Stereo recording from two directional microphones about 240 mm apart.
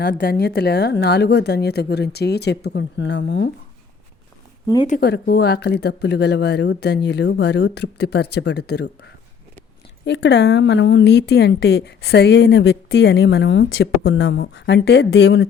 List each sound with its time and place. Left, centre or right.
0.0 s a woman's voice: left
4.9 s a woman's voice: left
10.1 s a woman's voice: left